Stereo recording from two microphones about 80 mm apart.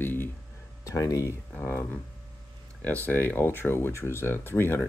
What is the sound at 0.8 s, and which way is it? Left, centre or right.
Speech, left.